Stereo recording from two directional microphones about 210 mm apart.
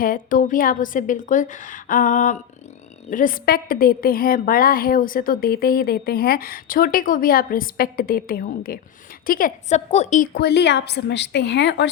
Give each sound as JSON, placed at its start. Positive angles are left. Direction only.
{"t": 0.0, "sound": "a woman's voice", "side_deg": 40}
{"t": 10.3, "sound": "a woman's voice", "side_deg": 50}